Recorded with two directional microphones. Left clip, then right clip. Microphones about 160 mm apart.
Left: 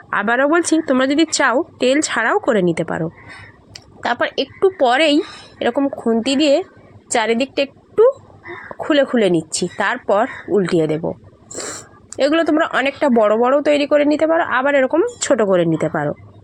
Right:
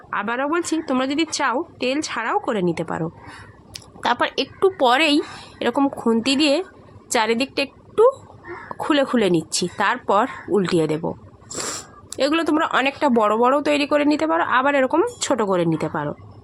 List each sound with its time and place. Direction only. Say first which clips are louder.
0.1 s a woman's voice: left 7 dB; 25° left (ahead or behind)
3.7 s a woman's voice: left 1 dB; 5° left (ahead or behind)